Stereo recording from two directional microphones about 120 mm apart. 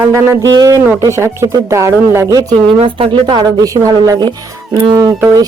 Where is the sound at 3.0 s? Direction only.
45° right (ahead or behind).